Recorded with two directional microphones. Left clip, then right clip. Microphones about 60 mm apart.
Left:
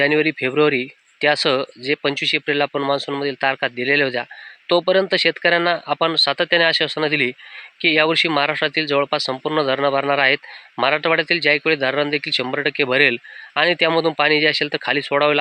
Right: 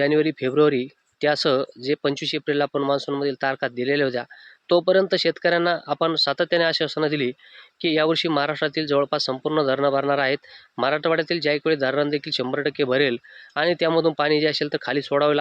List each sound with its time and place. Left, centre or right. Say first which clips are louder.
0.0 s speech: left 3 dB; right